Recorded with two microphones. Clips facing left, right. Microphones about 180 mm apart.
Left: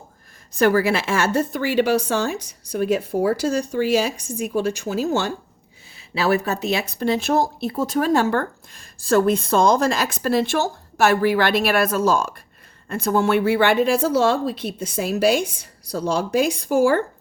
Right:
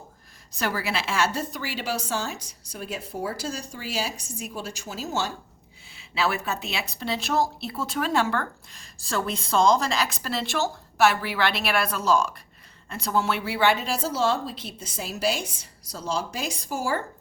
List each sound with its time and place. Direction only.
0.5 s a woman's voice: 50° left (ahead or behind)
5.9 s a woman's voice: 40° left (ahead or behind); by 17.0 s 60° left (ahead or behind)